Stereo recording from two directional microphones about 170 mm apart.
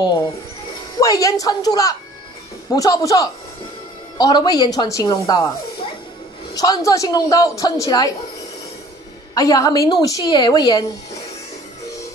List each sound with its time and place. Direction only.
0.9 s a woman's voice: 20° left (ahead or behind)
6.5 s a woman's voice: 20° left (ahead or behind)
9.3 s a woman's voice: 20° left (ahead or behind)